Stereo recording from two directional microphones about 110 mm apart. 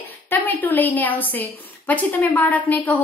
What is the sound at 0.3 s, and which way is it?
A woman's voice, 15° left (ahead or behind).